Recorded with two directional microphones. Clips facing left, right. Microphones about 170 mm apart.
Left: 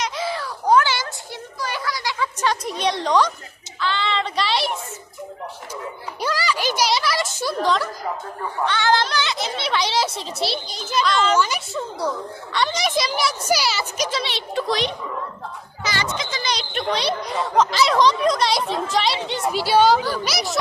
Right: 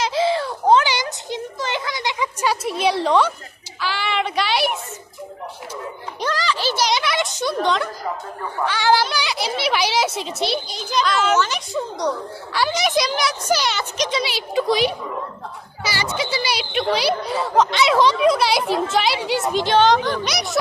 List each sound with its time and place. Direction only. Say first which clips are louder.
0.0 s a sound: right 6 dB; 30° right (ahead or behind)
2.4 s a woman's voice: right 3 dB; 5° right (ahead or behind)
6.2 s a woman's voice: right 1 dB; 10° left (ahead or behind)
6.9 s speech: right 1 dB; centre (ahead or behind)
8.6 s a woman's voice: right 2 dB; 10° right (ahead or behind)
10.4 s a woman's voice: right 1 dB; centre (ahead or behind)
11.3 s a woman's voice: right 1 dB; 10° left (ahead or behind)
12.5 s a woman's voice: right 2 dB; 5° right (ahead or behind)
19.5 s a woman's voice: even; 10° left (ahead or behind)